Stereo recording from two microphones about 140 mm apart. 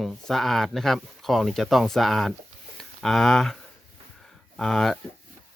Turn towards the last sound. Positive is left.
turn(degrees=0)  # may be behind; listen again after turning